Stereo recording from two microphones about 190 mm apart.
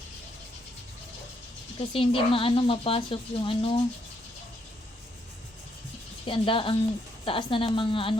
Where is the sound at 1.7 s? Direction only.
30° left (ahead or behind).